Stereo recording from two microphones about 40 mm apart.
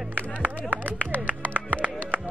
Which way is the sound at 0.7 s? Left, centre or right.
Right.